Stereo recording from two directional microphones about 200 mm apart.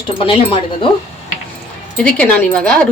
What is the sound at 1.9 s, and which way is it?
Speech, 5° left (ahead or behind).